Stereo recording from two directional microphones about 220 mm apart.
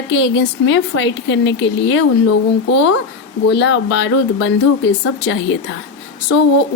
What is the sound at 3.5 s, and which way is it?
Speech, 55° left (ahead or behind).